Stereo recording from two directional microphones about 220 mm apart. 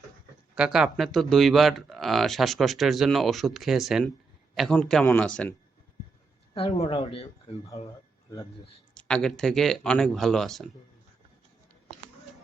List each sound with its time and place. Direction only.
0.5 s speech: 5° right (ahead or behind)
6.5 s speech: 30° left (ahead or behind)
9.0 s speech: 5° left (ahead or behind)